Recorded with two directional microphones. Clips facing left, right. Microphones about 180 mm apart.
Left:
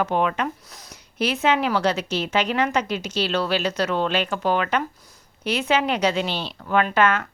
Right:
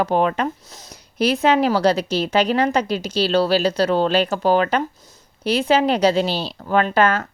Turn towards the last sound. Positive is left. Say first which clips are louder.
# right 2 dB
turn(degrees=-35)  # may be behind; listen again after turning